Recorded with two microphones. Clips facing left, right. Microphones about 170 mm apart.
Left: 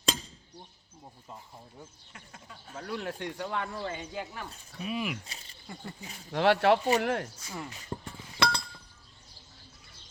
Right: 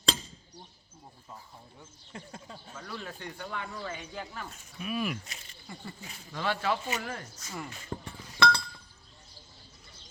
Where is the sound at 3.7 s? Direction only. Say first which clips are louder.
Left 3 dB; 25° left (ahead or behind).